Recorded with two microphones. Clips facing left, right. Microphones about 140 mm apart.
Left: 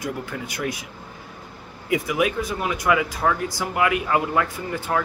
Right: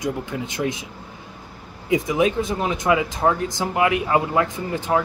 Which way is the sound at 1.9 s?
25° right (ahead or behind).